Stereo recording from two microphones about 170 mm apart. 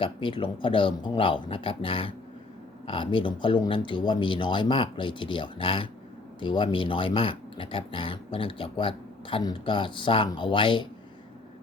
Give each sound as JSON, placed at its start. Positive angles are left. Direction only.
{"t": 0.0, "sound": "speech", "side_deg": 30}